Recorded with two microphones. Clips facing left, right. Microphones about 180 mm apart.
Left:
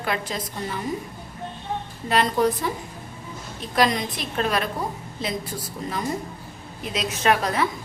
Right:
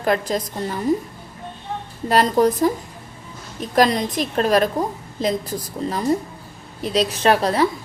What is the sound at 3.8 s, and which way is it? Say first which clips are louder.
A woman's voice: right 5 dB; 40° right (ahead or behind).